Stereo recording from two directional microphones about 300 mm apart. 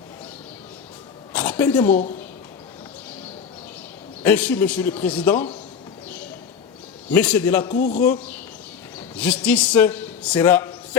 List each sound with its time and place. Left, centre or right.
1.3 s a sound: centre
4.2 s a man's voice: centre
7.1 s a man's voice: centre
7.7 s a man's voice: left
9.1 s a man's voice: centre